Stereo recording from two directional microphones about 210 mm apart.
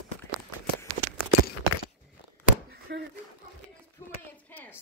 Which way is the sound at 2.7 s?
55° right (ahead or behind).